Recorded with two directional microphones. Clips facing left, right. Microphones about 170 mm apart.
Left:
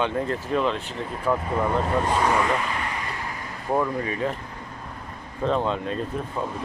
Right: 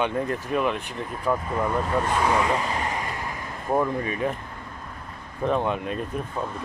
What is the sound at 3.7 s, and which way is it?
Speech, 20° right (ahead or behind).